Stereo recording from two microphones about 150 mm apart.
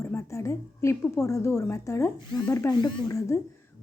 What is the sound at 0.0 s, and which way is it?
A woman's voice, 20° left (ahead or behind).